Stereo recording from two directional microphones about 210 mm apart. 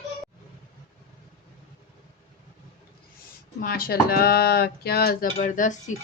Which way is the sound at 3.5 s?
45° left (ahead or behind).